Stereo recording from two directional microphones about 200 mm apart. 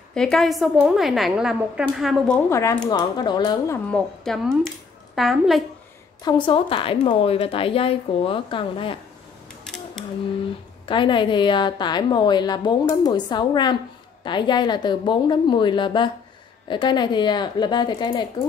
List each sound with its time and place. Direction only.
0.1 s a woman's voice: 5° left (ahead or behind)
3.9 s speech: 5° left (ahead or behind)
6.2 s a woman's voice: 25° left (ahead or behind)
9.7 s a sound: 5° left (ahead or behind)
10.9 s a woman's voice: 25° left (ahead or behind)